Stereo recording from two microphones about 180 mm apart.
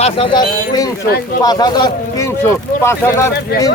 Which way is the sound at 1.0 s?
60° left (ahead or behind).